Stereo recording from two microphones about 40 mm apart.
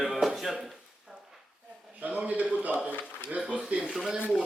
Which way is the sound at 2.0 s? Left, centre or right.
Right.